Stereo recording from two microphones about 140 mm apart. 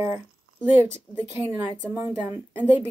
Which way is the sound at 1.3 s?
15° right (ahead or behind).